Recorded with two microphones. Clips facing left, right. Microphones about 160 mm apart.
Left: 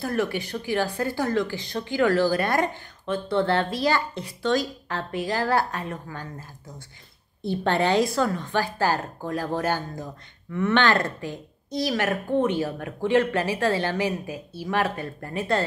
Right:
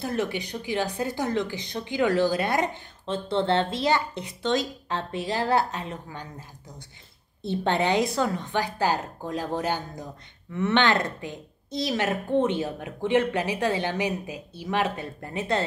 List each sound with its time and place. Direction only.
0.0 s a woman's voice: 20° right (ahead or behind)
7.4 s a woman's voice: 20° right (ahead or behind)